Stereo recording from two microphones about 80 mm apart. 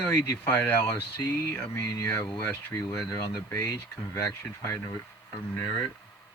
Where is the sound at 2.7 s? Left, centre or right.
Left.